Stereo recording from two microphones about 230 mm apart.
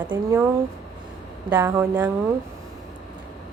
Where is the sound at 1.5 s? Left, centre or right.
Centre.